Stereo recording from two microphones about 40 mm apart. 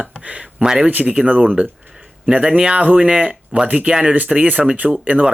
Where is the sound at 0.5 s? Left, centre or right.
Centre.